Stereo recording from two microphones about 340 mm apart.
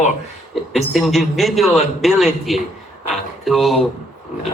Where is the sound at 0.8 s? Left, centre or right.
Centre.